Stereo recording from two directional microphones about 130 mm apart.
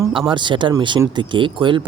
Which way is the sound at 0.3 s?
40° right (ahead or behind).